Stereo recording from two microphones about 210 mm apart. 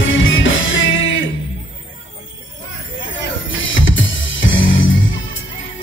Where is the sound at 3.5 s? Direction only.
65° left (ahead or behind).